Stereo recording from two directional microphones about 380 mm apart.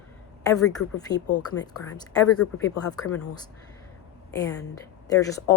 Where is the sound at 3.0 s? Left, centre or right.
Left.